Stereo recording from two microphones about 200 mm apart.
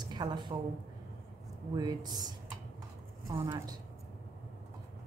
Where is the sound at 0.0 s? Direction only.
20° right (ahead or behind).